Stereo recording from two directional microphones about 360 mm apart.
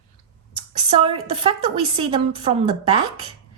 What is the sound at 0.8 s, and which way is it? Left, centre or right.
A woman's voice, centre.